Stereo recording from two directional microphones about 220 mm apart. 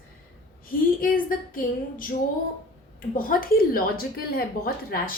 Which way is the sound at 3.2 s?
40° left (ahead or behind).